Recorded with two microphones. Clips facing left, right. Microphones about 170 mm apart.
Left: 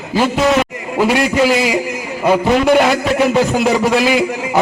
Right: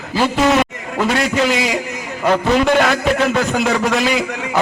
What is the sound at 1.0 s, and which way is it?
A man's voice, 5° left (ahead or behind).